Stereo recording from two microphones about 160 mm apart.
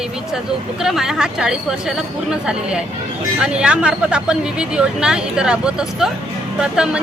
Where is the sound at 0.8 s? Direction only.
5° right (ahead or behind).